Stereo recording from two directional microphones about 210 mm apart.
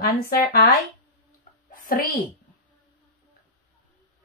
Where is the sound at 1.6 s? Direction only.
40° left (ahead or behind).